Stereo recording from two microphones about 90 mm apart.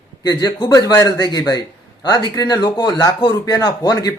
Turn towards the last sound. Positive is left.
turn(degrees=45)  # may be behind; listen again after turning